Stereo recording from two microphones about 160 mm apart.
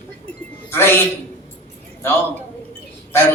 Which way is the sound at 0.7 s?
15° left (ahead or behind).